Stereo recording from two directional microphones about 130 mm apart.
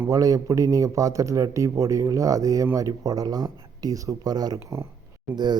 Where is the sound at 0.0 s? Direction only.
25° right (ahead or behind).